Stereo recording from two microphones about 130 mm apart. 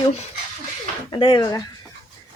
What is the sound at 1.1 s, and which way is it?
Speech, 35° left (ahead or behind).